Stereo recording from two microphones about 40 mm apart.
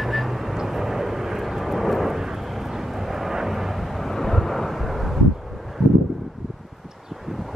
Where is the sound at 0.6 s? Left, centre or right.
Centre.